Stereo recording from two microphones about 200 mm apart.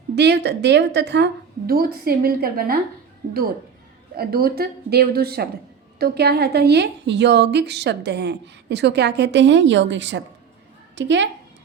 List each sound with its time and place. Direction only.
0.2 s a woman's voice: 55° right (ahead or behind)
4.2 s a woman's voice: 50° right (ahead or behind)